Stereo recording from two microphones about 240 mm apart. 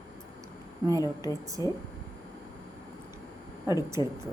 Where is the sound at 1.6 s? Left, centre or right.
Centre.